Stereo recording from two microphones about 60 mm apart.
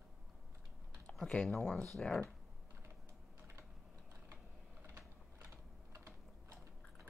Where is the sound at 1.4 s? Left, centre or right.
Centre.